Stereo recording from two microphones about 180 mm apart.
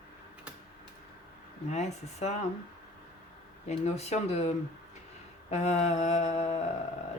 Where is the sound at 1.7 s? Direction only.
40° left (ahead or behind).